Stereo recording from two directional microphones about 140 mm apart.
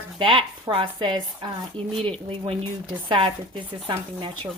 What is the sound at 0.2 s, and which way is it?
Speech, 35° right (ahead or behind).